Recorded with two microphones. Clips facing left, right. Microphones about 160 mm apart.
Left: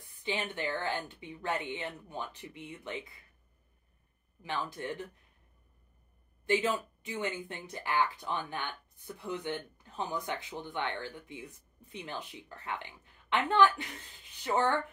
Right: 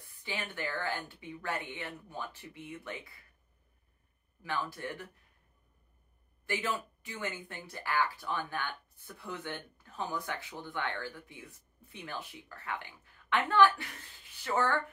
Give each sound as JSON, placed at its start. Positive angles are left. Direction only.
{"t": 0.0, "sound": "speech", "side_deg": 20}
{"t": 4.4, "sound": "speech", "side_deg": 20}
{"t": 6.4, "sound": "speech", "side_deg": 20}